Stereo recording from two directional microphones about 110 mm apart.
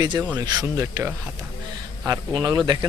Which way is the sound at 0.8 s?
25° right (ahead or behind).